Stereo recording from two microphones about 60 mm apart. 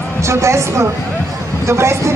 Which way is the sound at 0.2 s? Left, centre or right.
Right.